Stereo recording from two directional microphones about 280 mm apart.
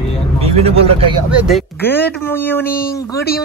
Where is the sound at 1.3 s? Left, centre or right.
Centre.